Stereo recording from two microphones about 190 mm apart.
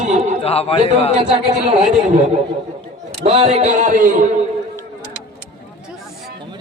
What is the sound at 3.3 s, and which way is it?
Speech, 30° right (ahead or behind).